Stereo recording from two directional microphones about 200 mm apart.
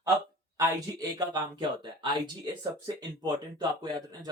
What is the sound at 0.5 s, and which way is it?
Speech, 15° right (ahead or behind).